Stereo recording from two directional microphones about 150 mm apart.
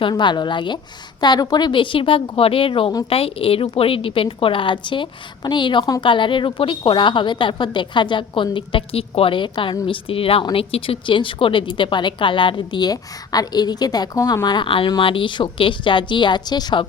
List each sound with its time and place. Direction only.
0.0 s speech: 30° left (ahead or behind)